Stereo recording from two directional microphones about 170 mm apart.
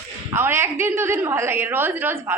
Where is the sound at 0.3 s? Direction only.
15° right (ahead or behind).